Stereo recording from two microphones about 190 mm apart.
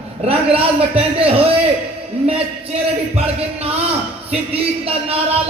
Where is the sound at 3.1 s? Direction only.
30° right (ahead or behind).